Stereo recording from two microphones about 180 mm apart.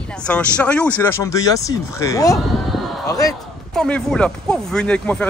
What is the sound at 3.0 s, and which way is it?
Speech, 20° left (ahead or behind).